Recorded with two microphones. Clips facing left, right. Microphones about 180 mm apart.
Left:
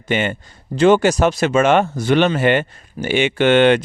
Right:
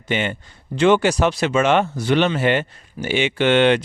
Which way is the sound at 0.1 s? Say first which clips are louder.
Left 3 dB; 50° left (ahead or behind).